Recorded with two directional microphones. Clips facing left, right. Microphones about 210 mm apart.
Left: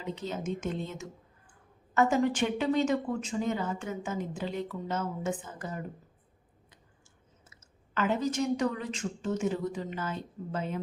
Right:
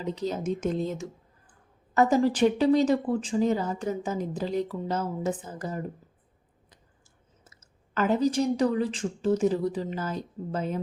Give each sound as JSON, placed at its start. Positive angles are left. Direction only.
{"t": 0.0, "sound": "speech", "side_deg": -35}
{"t": 7.5, "sound": "speech", "side_deg": -40}